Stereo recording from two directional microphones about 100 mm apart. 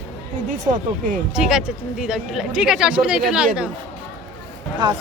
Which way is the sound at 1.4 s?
5° right (ahead or behind).